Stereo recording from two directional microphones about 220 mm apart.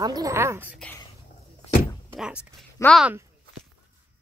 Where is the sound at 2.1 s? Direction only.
5° right (ahead or behind).